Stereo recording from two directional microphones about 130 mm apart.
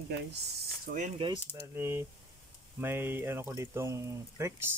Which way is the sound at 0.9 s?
90° right.